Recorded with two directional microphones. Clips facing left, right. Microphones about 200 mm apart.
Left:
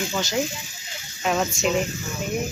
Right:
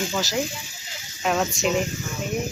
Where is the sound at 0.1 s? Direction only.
Centre (ahead or behind).